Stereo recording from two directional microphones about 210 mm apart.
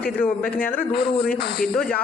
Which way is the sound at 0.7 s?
50° left (ahead or behind).